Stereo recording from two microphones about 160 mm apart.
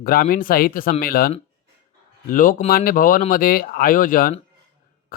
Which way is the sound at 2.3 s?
60° left (ahead or behind).